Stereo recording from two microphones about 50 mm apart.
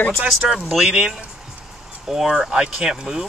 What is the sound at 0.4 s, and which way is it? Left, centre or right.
Speech, centre.